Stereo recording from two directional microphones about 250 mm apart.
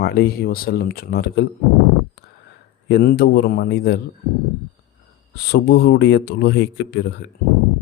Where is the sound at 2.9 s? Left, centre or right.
Left.